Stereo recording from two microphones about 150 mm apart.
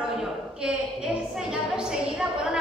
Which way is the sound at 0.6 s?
5° right (ahead or behind).